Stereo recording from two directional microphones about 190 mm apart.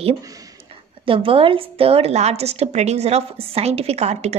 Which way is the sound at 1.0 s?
30° right (ahead or behind).